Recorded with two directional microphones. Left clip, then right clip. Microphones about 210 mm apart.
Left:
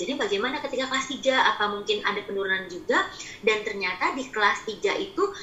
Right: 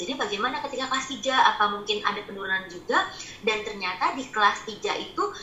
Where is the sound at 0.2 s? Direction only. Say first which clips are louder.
Even; 15° left (ahead or behind).